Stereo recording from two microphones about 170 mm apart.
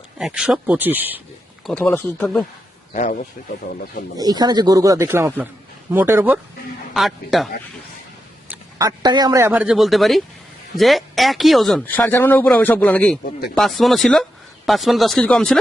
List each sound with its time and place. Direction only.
0.2 s speech: 5° right (ahead or behind)
1.6 s a man's voice: 5° left (ahead or behind)
2.9 s a man's voice: 45° left (ahead or behind)
4.2 s speech: 25° right (ahead or behind)
6.9 s speech: centre (ahead or behind)
8.8 s speech: 20° right (ahead or behind); by 11.8 s centre (ahead or behind)
11.9 s a man's voice: 10° left (ahead or behind)